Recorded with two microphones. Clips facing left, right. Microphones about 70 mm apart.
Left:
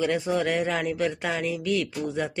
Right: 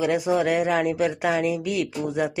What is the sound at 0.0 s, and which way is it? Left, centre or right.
Speech, centre.